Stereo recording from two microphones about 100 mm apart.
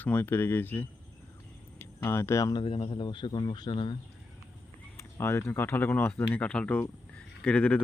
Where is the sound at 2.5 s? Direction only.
60° left (ahead or behind).